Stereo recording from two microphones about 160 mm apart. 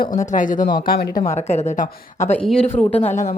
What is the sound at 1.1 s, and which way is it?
Speech, 25° left (ahead or behind).